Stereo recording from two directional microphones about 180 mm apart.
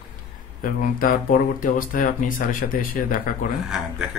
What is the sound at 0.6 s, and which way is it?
Speech, 50° left (ahead or behind).